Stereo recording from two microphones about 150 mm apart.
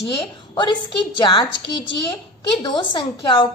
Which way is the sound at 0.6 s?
30° left (ahead or behind).